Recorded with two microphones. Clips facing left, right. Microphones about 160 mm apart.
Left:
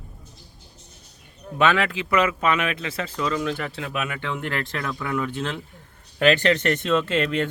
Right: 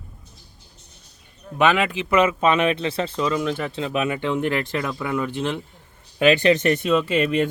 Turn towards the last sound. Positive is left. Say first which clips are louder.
# right 2 dB
turn(degrees=-15)  # may be behind; listen again after turning